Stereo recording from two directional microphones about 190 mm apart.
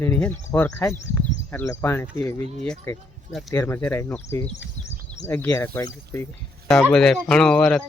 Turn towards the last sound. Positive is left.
turn(degrees=5)  # may be behind; listen again after turning